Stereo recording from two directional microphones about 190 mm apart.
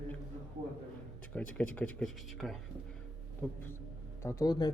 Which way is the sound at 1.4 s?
5° left (ahead or behind).